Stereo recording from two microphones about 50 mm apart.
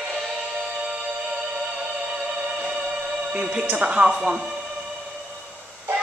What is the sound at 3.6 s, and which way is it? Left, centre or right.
Speech, right.